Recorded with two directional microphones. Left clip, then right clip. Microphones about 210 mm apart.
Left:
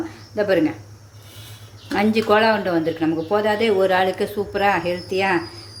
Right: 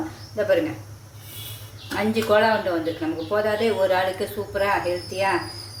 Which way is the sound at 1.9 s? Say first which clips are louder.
Left 3 dB; 45° left (ahead or behind).